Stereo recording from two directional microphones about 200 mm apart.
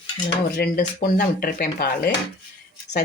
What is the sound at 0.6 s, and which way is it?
Speech, 45° left (ahead or behind).